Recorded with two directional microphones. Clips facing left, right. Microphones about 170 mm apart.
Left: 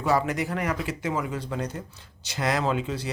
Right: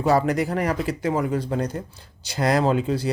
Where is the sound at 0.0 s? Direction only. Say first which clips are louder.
Right 5 dB; 35° right (ahead or behind).